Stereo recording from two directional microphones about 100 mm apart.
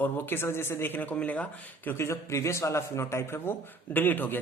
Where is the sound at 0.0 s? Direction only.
20° left (ahead or behind).